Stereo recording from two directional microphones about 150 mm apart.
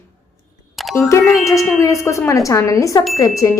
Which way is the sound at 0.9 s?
15° left (ahead or behind).